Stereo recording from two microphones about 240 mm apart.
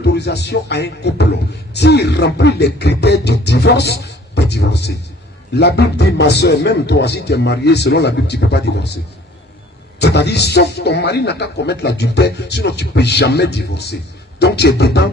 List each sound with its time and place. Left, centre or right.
0.0 s a man's voice: left
10.0 s a man's voice: left